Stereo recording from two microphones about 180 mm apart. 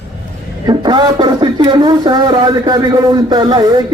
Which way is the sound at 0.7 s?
25° right (ahead or behind).